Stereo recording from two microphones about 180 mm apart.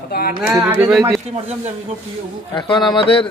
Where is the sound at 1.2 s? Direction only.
35° right (ahead or behind).